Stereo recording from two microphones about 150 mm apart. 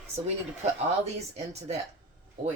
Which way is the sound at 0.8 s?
45° right (ahead or behind).